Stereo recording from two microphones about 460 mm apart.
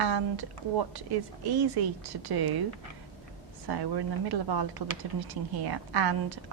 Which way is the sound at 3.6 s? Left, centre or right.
Right.